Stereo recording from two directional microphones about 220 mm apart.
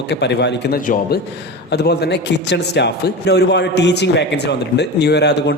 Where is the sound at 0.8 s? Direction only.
40° left (ahead or behind).